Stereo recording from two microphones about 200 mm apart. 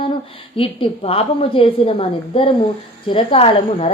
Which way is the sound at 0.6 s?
30° left (ahead or behind).